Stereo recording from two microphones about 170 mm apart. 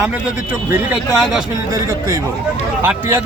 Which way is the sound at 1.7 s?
20° right (ahead or behind).